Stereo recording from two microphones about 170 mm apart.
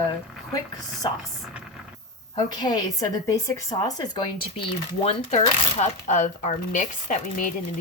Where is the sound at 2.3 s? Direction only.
25° left (ahead or behind).